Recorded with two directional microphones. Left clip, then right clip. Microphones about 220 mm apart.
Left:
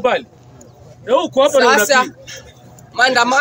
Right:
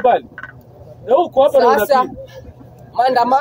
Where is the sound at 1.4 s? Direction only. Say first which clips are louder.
Left 1 dB; centre (ahead or behind).